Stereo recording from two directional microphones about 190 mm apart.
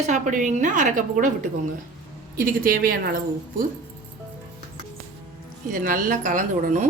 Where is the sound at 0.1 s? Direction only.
40° right (ahead or behind).